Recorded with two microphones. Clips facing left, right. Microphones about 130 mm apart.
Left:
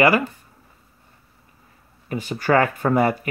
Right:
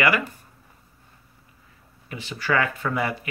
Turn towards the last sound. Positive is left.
turn(degrees=45)  # may be behind; listen again after turning